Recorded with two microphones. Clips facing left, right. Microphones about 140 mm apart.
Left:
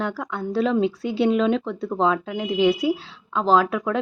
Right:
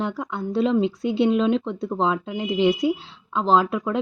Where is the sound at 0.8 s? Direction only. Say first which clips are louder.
Even; centre (ahead or behind).